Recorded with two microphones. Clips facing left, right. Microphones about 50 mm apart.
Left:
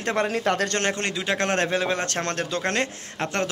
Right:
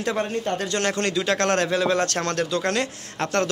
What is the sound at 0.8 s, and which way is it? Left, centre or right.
Speech, left.